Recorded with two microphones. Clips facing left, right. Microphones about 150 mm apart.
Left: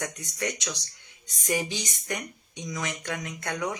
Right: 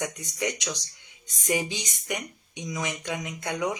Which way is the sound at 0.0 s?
20° right (ahead or behind).